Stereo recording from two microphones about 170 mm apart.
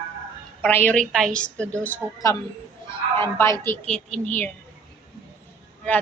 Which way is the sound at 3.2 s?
15° left (ahead or behind).